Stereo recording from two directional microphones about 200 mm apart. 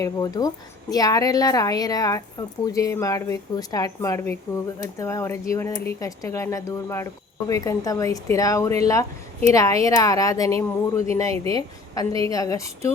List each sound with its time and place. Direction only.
0.0 s a woman's voice: 20° left (ahead or behind)